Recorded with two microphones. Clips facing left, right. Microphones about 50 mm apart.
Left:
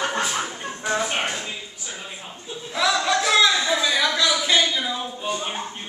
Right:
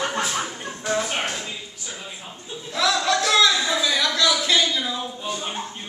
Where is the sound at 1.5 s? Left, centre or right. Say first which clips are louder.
Left 1 dB; centre.